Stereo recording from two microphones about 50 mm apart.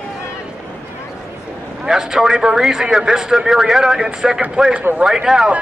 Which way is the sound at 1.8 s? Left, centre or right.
Centre.